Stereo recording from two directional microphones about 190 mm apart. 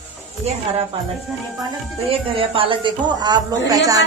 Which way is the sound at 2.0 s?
30° right (ahead or behind).